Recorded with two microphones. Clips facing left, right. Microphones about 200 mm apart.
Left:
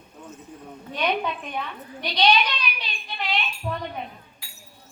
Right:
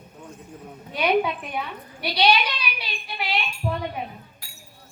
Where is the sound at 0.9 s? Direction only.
10° right (ahead or behind).